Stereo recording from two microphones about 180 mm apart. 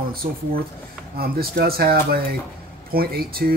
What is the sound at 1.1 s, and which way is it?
Speech, 60° right (ahead or behind).